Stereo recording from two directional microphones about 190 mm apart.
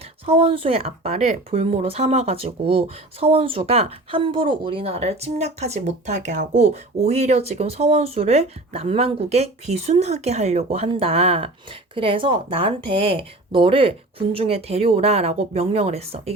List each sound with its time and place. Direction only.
0.3 s speech: 30° right (ahead or behind)